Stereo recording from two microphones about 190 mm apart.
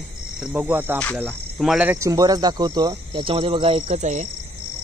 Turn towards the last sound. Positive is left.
turn(degrees=-40)  # may be behind; listen again after turning